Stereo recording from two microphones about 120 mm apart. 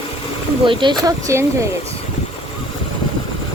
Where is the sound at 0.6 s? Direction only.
45° right (ahead or behind).